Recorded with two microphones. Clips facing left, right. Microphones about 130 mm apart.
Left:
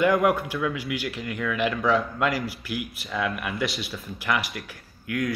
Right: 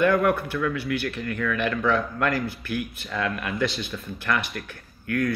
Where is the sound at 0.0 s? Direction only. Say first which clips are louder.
Even; 15° left (ahead or behind).